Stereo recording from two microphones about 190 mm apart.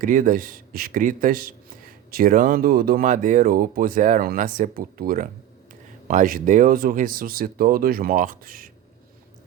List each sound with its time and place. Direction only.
0.0 s speech: 45° right (ahead or behind)